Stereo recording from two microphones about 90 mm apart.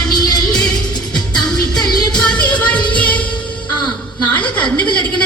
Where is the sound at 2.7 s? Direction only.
60° left (ahead or behind).